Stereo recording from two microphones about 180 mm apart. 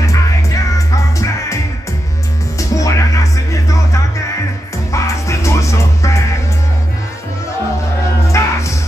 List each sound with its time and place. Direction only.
0.0 s music: 20° left (ahead or behind)
8.3 s music: 15° left (ahead or behind)